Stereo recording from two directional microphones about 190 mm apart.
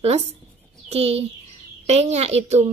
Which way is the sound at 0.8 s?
35° right (ahead or behind).